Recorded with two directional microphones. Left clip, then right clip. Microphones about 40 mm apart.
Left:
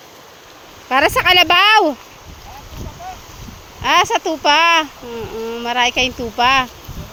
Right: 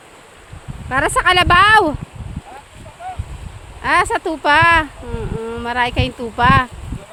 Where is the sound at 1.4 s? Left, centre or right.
Centre.